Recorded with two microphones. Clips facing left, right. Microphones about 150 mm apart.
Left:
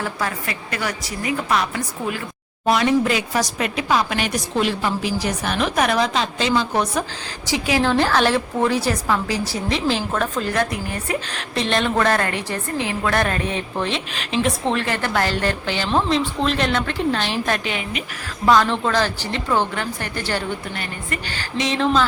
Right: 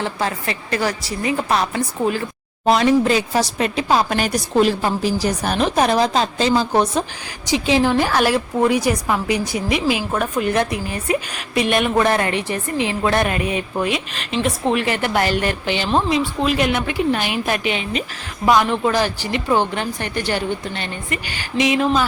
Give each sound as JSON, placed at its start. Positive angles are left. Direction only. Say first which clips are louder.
{"t": 0.0, "sound": "speech", "louder": "right 3 dB", "side_deg": -25}
{"t": 7.5, "sound": "a woman's voice", "louder": "right 3 dB", "side_deg": -20}
{"t": 7.9, "sound": "a woman's voice", "louder": "right 1 dB", "side_deg": -10}
{"t": 14.7, "sound": "a woman's voice", "louder": "right 3 dB", "side_deg": -15}